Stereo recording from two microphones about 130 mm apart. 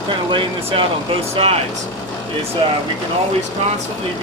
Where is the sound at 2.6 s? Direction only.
45° right (ahead or behind).